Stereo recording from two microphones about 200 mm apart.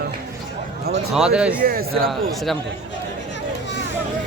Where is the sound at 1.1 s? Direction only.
5° right (ahead or behind).